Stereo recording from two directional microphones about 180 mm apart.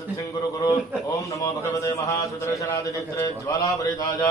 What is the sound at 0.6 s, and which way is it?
A man's voice, 20° left (ahead or behind).